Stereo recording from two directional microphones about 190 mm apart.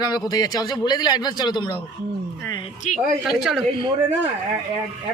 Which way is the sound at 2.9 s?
40° left (ahead or behind).